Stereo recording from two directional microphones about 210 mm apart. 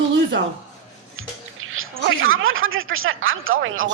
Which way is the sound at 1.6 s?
70° right (ahead or behind).